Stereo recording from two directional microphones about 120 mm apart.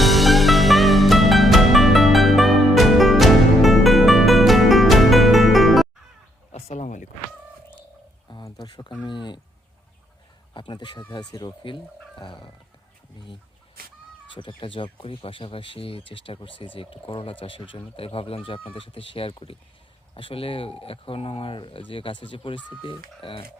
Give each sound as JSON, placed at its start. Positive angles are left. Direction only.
{"t": 0.0, "sound": "music", "side_deg": 0}
{"t": 6.5, "sound": "bow-wow", "side_deg": 70}
{"t": 8.3, "sound": "a sound", "side_deg": 35}
{"t": 10.5, "sound": "speech", "side_deg": 40}
{"t": 14.3, "sound": "speech", "side_deg": 45}